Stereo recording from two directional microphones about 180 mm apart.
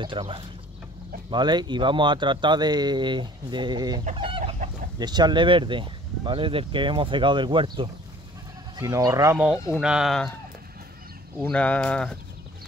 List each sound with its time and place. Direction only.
0.0 s speech: 30° right (ahead or behind)
4.0 s chicken: 30° right (ahead or behind)
4.9 s speech: 25° right (ahead or behind)
9.8 s speech: 5° right (ahead or behind)
11.5 s speech: 5° left (ahead or behind)